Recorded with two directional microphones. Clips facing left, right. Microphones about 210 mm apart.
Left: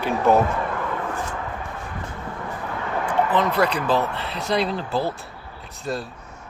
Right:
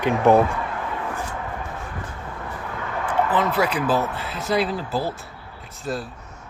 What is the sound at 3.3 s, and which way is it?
Speech, 5° right (ahead or behind).